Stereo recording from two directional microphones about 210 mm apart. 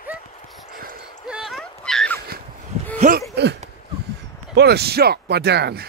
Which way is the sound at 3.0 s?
35° right (ahead or behind).